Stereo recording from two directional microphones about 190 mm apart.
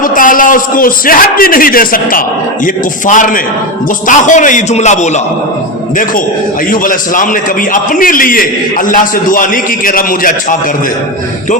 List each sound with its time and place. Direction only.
0.0 s a man's voice: 45° left (ahead or behind)
6.7 s a man's voice: 45° left (ahead or behind)